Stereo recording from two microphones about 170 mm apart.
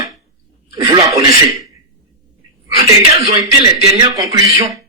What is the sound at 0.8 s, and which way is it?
Speech, 25° right (ahead or behind).